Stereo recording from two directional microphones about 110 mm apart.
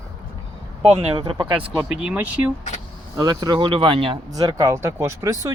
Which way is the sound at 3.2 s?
35° right (ahead or behind).